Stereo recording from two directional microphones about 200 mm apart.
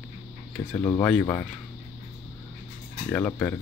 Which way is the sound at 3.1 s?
10° left (ahead or behind).